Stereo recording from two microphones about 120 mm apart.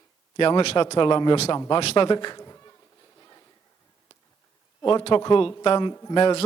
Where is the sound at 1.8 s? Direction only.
60° left (ahead or behind).